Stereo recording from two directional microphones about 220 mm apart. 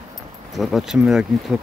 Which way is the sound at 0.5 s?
Centre (ahead or behind).